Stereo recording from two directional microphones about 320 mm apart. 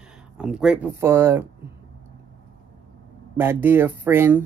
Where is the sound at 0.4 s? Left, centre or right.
Centre.